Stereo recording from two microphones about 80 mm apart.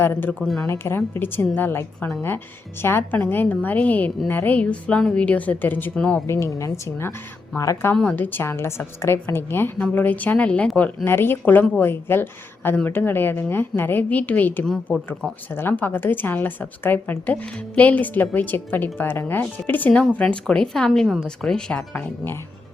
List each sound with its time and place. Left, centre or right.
0.0 s a woman's voice: left
0.4 s speech: centre
0.7 s a woman's voice: left
5.9 s a woman's voice: centre
6.2 s a woman's voice: left
8.1 s a woman's voice: left
14.9 s speech: centre
15.5 s a woman's voice: left
20.1 s a woman's voice: centre